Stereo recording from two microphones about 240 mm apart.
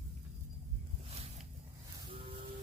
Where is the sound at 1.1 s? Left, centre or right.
Right.